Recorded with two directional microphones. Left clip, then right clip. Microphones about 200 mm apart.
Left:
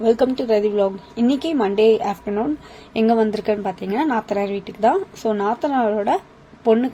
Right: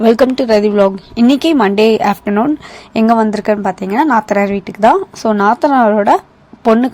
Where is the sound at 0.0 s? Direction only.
45° right (ahead or behind).